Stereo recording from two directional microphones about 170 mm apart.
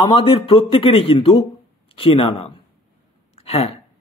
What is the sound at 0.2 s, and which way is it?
Speech, 30° left (ahead or behind).